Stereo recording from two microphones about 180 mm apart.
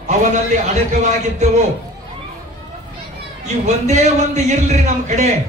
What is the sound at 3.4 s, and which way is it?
A man's voice, 40° right (ahead or behind).